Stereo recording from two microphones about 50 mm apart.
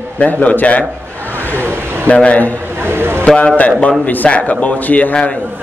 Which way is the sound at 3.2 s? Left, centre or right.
Left.